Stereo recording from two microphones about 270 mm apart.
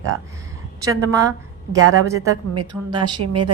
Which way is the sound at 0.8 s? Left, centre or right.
Centre.